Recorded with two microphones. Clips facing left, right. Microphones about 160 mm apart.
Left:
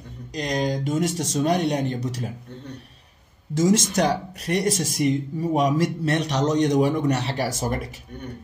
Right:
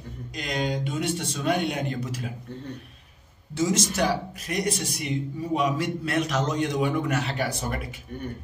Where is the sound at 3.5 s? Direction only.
45° left (ahead or behind).